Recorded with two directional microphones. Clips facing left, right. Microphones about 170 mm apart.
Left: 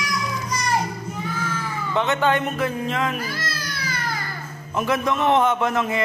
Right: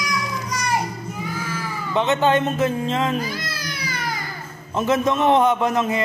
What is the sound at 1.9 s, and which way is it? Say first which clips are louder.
A man's voice: right 2 dB; 20° right (ahead or behind).